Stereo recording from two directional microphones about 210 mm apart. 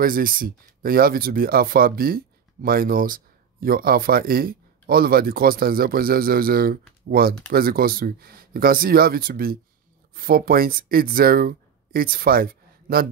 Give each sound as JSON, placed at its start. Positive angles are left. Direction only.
{"t": 0.0, "sound": "speech", "side_deg": -45}